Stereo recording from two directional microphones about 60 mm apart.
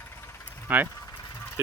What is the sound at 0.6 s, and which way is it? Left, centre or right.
Speech, right.